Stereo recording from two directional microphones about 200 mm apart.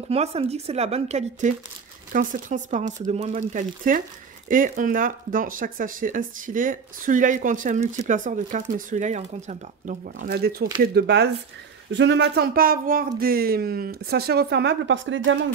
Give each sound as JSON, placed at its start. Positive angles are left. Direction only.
{"t": 0.1, "sound": "speech", "side_deg": -30}